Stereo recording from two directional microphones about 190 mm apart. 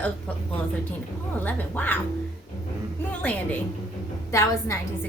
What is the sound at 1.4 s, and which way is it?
Speech, 10° left (ahead or behind).